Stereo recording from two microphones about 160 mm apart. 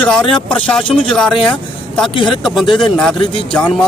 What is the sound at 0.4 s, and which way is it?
Speech, 10° left (ahead or behind).